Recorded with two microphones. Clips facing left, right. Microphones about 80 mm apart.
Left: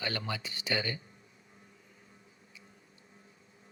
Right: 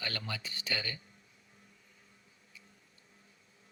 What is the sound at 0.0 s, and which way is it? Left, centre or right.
Speech, left.